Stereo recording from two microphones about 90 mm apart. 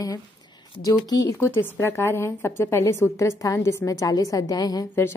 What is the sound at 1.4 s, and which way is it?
A woman's voice, 30° left (ahead or behind).